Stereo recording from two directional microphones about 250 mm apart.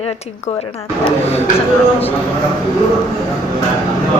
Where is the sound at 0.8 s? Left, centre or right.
Centre.